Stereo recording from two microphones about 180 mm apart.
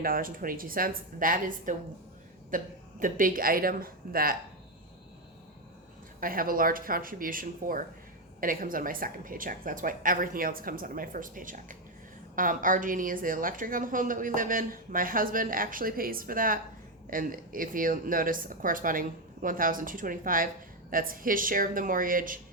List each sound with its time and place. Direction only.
0.0 s a woman's voice: 50° right (ahead or behind)
6.1 s a woman's voice: 50° right (ahead or behind)